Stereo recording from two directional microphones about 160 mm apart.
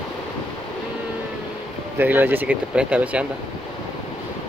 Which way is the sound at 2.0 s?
10° right (ahead or behind).